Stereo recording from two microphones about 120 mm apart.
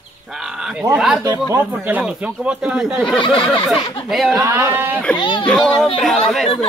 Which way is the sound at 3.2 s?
45° left (ahead or behind).